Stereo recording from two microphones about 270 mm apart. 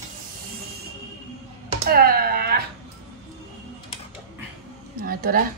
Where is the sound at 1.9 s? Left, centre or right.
Right.